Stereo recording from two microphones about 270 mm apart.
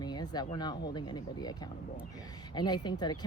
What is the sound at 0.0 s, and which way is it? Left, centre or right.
Speech, centre.